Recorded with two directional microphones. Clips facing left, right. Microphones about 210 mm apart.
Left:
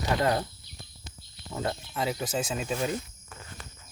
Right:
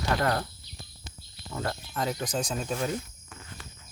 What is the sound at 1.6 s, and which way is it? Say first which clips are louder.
Cricket: left 1 dB; 20° left (ahead or behind).